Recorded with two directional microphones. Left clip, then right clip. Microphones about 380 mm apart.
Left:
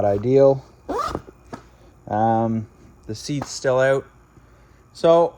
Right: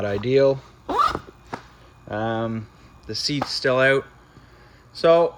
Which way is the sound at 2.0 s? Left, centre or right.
Centre.